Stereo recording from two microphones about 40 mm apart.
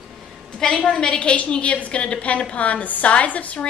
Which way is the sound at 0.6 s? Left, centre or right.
Centre.